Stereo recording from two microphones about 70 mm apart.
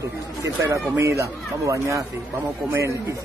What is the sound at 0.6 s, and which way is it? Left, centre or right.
Speech, right.